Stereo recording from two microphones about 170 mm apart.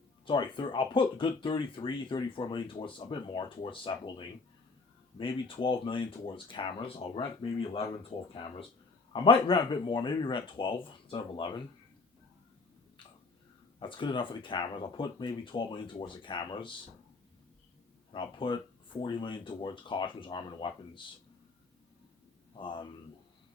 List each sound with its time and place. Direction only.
0.3 s speech: 30° left (ahead or behind)
5.1 s speech: 30° left (ahead or behind)
13.7 s speech: 30° left (ahead or behind)
18.1 s speech: 30° left (ahead or behind)
22.5 s speech: 30° left (ahead or behind)